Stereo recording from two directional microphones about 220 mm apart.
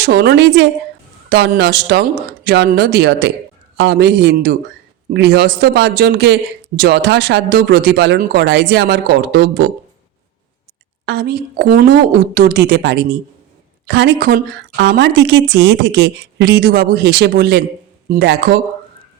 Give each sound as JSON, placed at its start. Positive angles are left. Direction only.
{"t": 0.0, "sound": "a woman's voice", "side_deg": -45}
{"t": 11.0, "sound": "a woman's voice", "side_deg": -50}